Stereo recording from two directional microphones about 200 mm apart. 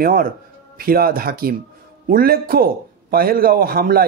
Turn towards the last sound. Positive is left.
turn(degrees=-45)  # may be behind; listen again after turning